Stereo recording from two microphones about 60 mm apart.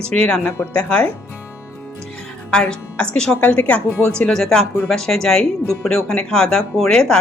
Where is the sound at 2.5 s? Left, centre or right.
Centre.